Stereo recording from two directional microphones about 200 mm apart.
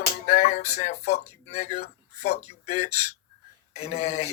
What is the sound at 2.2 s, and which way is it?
Speech, 55° left (ahead or behind).